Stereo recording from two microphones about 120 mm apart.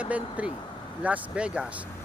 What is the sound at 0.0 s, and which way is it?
Speech, 10° right (ahead or behind).